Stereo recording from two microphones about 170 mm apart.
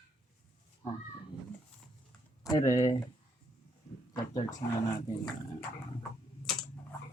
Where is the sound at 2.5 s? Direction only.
20° left (ahead or behind).